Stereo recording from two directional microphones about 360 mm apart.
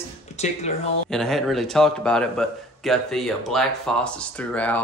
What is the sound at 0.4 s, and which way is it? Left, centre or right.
Speech, centre.